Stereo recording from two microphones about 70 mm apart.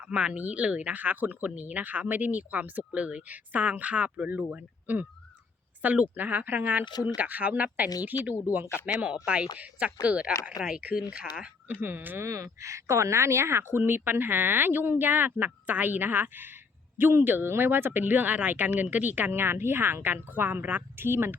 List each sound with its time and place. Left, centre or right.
0.0 s speech: centre
11.7 s speech: right
12.2 s speech: right